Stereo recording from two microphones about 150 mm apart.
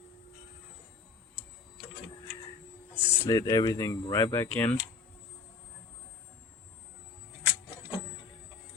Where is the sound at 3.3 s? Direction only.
25° left (ahead or behind).